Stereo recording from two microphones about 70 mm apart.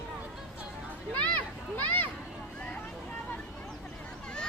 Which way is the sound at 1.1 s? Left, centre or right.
Left.